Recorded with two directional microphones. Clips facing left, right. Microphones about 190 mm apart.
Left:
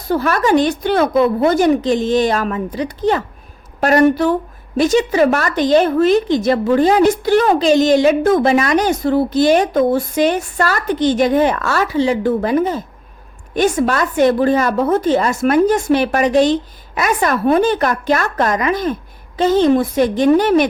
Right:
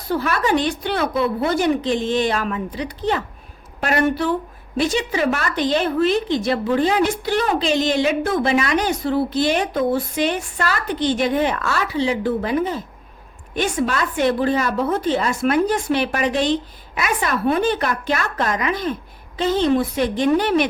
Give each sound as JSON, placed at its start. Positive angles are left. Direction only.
{"t": 0.1, "sound": "a woman's voice", "side_deg": 45}